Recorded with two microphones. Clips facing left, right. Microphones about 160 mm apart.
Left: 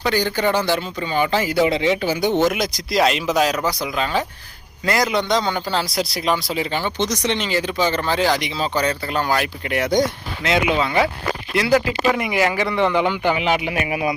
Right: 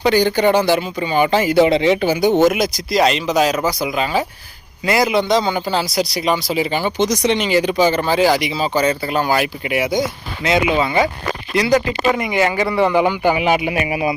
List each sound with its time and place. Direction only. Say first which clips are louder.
0.0 s speech: right 5 dB; 15° right (ahead or behind)
2.1 s speech: right 5 dB; 10° right (ahead or behind)